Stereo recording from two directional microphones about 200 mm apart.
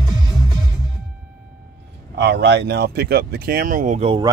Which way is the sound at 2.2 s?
60° right (ahead or behind).